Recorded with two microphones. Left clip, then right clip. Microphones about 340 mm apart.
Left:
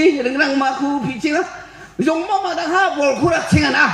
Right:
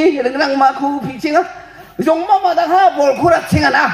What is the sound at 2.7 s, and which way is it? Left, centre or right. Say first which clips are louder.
Speech: right 3 dB; centre.